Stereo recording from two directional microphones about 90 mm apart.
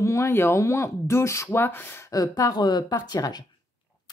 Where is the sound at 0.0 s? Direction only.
30° left (ahead or behind).